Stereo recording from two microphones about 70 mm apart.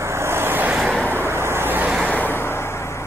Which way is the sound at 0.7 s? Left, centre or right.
Centre.